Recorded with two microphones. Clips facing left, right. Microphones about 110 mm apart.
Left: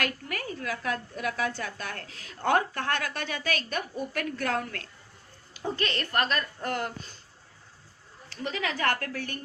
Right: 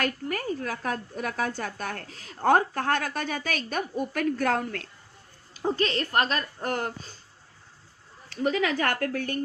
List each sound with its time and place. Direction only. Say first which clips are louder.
0.0 s a woman's voice: right 4 dB; 40° right (ahead or behind)
8.4 s a woman's voice: right 4 dB; 40° right (ahead or behind)